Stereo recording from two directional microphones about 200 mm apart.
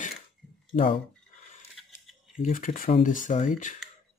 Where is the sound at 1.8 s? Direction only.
Centre (ahead or behind).